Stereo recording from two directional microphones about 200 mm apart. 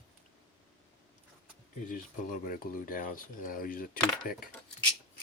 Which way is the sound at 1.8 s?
40° left (ahead or behind).